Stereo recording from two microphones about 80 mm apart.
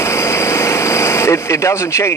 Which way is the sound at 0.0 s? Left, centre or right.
Left.